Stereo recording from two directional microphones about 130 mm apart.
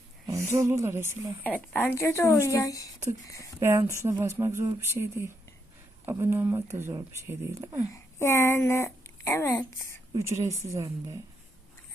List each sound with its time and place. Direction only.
0.3 s speech: 20° right (ahead or behind)
1.5 s speech: 10° left (ahead or behind)
3.6 s speech: 20° right (ahead or behind)
7.9 s a woman's voice: 20° left (ahead or behind)
10.2 s speech: 20° right (ahead or behind)